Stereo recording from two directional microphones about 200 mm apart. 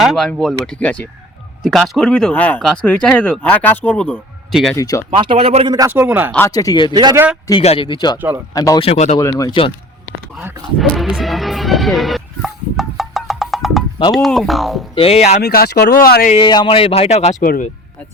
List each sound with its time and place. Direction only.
0.0 s speech: centre (ahead or behind)
4.8 s speech: 15° left (ahead or behind)
5.1 s speech: 25° right (ahead or behind)
5.7 s a man's voice: 15° right (ahead or behind)
6.3 s speech: 15° left (ahead or behind)
6.9 s speech: 20° right (ahead or behind)
7.6 s speech: 25° left (ahead or behind)
8.8 s speech: 35° left (ahead or behind)
9.1 s speech: 15° left (ahead or behind)
10.3 s speech: centre (ahead or behind)
14.9 s speech: 30° left (ahead or behind)
15.4 s speech: 50° left (ahead or behind)
16.3 s speech: 20° left (ahead or behind)